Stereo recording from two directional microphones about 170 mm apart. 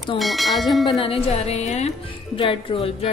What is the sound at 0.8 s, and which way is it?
Music, 30° left (ahead or behind).